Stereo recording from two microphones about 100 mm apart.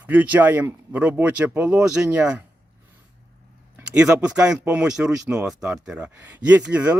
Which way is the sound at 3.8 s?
10° right (ahead or behind).